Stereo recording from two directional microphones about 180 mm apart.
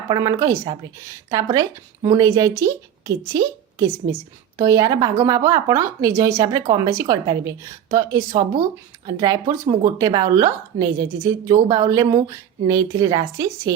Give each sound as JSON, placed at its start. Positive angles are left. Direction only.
{"t": 0.1, "sound": "a woman's voice", "side_deg": -20}
{"t": 4.5, "sound": "a woman's voice", "side_deg": -20}